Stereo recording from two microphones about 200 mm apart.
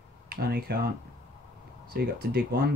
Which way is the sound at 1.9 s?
50° right (ahead or behind).